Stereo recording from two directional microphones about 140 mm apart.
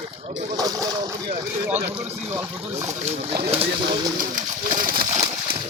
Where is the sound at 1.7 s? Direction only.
50° right (ahead or behind).